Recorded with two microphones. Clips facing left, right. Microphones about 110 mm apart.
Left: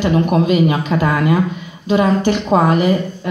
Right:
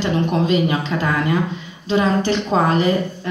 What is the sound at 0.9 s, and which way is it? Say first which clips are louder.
Speech: left 5 dB; 35° left (ahead or behind).